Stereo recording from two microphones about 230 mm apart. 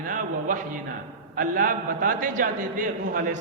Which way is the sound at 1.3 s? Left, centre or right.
Right.